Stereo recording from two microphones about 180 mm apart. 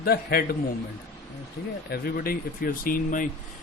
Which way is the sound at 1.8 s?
55° left (ahead or behind).